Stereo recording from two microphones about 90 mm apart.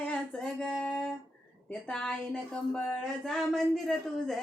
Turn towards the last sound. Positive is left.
turn(degrees=5)  # may be behind; listen again after turning